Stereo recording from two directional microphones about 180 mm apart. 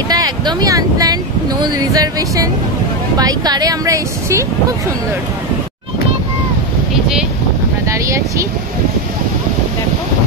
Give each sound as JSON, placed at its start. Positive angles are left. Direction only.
{"t": 0.1, "sound": "speech", "side_deg": -20}
{"t": 7.9, "sound": "speech", "side_deg": -15}